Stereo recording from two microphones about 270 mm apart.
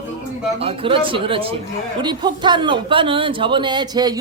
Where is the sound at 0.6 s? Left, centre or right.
Centre.